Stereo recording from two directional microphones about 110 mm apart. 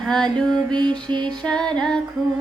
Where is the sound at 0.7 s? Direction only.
45° right (ahead or behind).